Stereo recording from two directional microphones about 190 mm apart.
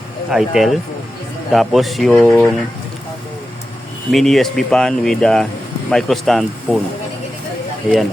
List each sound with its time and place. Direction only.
0.3 s speech: centre (ahead or behind)
4.1 s speech: centre (ahead or behind)